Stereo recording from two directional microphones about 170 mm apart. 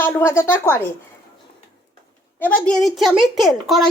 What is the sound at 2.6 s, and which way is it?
A woman's voice, centre (ahead or behind).